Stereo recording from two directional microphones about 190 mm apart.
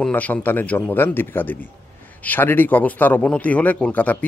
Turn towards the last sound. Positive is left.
turn(degrees=10)  # may be behind; listen again after turning